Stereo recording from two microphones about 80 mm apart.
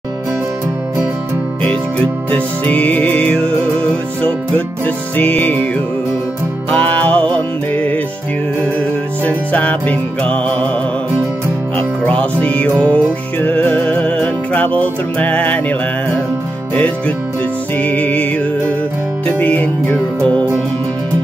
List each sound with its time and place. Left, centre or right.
1.7 s music: centre
6.7 s music: centre
9.2 s music: centre
12.0 s music: centre
17.7 s music: centre
19.2 s music: centre